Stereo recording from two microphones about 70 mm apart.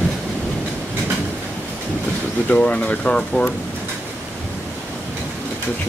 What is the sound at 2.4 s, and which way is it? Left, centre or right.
Speech, centre.